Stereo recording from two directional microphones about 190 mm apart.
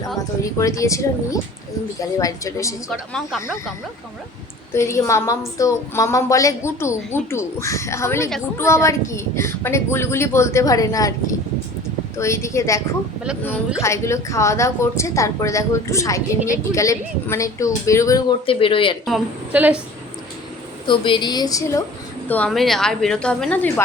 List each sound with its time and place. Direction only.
0.6 s a woman's voice: 15° left (ahead or behind)
2.9 s a woman's voice: centre (ahead or behind)
4.7 s a woman's voice: 15° left (ahead or behind)
12.1 s a woman's voice: 15° left (ahead or behind)
13.8 s a woman's voice: 15° left (ahead or behind)
18.4 s a woman's voice: 30° left (ahead or behind)
19.0 s a woman's voice: 5° right (ahead or behind)
20.8 s a woman's voice: 25° left (ahead or behind)
22.3 s a woman's voice: 5° left (ahead or behind)